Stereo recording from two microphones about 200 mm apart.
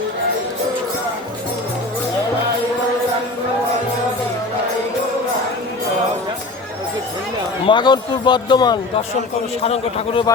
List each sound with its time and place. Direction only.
7.7 s a man's voice: 20° left (ahead or behind)